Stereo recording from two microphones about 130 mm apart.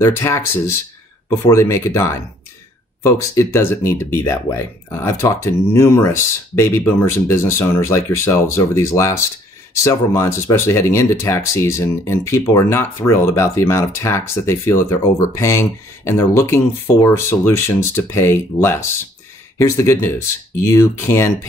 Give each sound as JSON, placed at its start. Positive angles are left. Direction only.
{"t": 0.0, "sound": "speech", "side_deg": 20}